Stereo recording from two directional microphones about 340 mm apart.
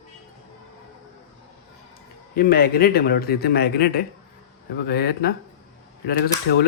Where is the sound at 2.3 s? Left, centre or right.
Left.